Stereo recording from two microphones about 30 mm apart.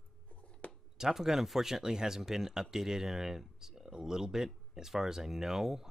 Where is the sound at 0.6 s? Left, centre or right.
Left.